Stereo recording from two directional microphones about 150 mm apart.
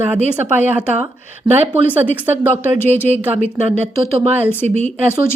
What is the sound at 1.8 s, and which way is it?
Speech, 10° right (ahead or behind).